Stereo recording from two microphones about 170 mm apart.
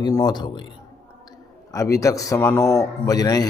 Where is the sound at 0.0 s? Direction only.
25° left (ahead or behind).